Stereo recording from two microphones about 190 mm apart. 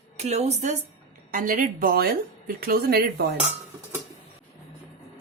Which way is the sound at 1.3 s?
45° right (ahead or behind).